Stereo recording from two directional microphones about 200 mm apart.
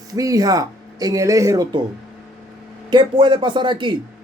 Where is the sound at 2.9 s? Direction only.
20° right (ahead or behind).